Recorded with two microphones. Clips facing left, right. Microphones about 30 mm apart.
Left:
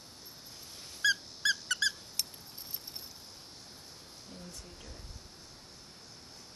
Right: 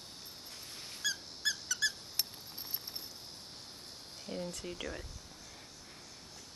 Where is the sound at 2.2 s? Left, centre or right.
Centre.